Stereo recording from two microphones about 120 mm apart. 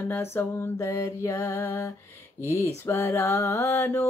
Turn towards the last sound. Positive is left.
turn(degrees=20)  # may be behind; listen again after turning